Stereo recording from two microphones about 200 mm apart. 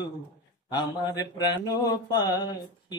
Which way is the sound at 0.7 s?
20° left (ahead or behind).